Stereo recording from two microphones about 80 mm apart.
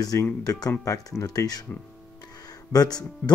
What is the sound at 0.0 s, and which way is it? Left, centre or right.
Speech, left.